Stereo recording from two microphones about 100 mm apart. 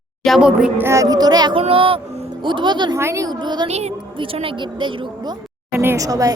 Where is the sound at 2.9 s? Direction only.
30° right (ahead or behind).